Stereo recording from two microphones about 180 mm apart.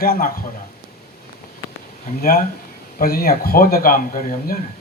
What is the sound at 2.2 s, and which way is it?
Speech, 55° left (ahead or behind).